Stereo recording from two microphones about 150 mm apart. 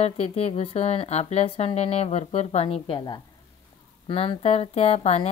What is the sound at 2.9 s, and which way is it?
A woman's voice, 30° left (ahead or behind).